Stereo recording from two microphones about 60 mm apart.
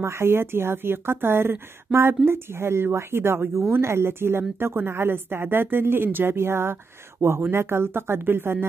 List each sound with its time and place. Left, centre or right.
0.0 s a woman's voice: right